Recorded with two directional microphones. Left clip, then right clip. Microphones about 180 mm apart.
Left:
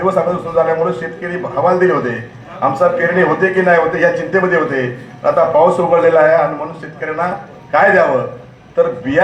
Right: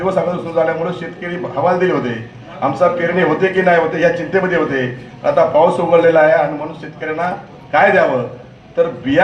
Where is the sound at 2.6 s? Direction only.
Centre (ahead or behind).